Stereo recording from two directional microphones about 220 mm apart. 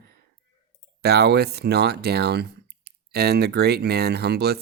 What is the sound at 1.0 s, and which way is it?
Speech, 45° right (ahead or behind).